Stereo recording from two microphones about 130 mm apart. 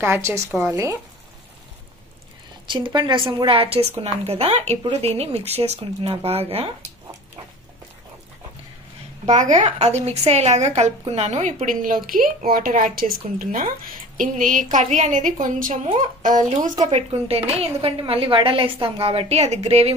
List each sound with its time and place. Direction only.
0.0 s a woman's voice: 20° right (ahead or behind)
2.6 s a woman's voice: 35° right (ahead or behind)
9.2 s a woman's voice: 65° right (ahead or behind)
16.4 s speech: 60° right (ahead or behind)
16.9 s a woman's voice: 50° right (ahead or behind)